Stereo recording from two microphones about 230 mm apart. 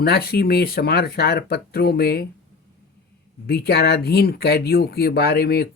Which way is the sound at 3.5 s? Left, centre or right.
Left.